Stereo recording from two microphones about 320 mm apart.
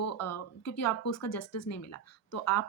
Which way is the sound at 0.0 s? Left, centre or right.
Left.